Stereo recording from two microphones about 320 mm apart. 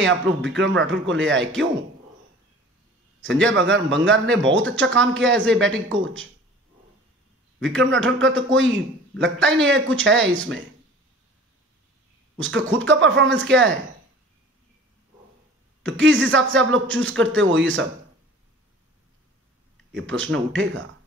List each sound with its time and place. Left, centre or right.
0.0 s speech: right
3.4 s speech: right
7.9 s speech: right
12.4 s speech: right
15.8 s speech: right
19.9 s speech: right